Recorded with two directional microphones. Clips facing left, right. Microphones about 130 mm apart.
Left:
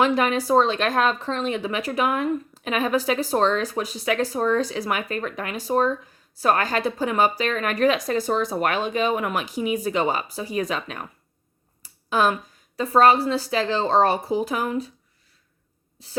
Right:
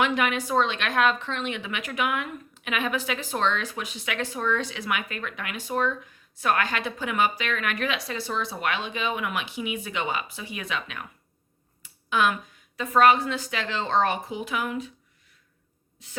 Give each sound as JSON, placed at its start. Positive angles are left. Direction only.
{"t": 0.0, "sound": "a woman's voice", "side_deg": 35}
{"t": 16.0, "sound": "speech", "side_deg": 35}